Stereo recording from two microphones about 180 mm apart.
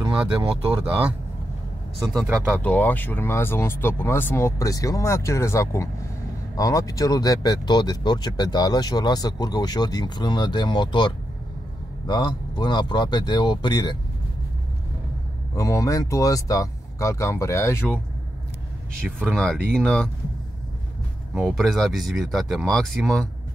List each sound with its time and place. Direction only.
2.0 s speech: centre (ahead or behind); by 11.1 s 25° left (ahead or behind)
12.1 s speech: 25° left (ahead or behind)
15.5 s speech: 20° left (ahead or behind)
19.2 s speech: 5° left (ahead or behind)
21.3 s speech: 5° right (ahead or behind)